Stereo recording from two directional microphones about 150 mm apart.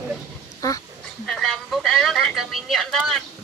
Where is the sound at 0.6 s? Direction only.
20° left (ahead or behind).